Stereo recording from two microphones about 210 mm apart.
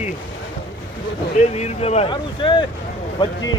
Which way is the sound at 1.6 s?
30° left (ahead or behind).